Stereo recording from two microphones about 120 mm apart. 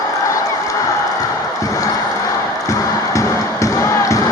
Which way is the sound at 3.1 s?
25° left (ahead or behind).